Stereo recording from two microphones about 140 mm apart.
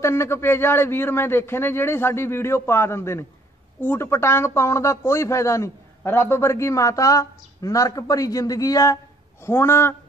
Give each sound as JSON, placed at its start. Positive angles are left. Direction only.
{"t": 0.0, "sound": "a man's voice", "side_deg": 20}